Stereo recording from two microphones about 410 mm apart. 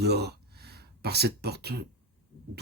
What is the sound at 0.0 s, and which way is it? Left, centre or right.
Speech, right.